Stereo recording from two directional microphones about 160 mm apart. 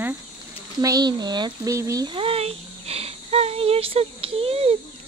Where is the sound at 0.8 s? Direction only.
25° right (ahead or behind).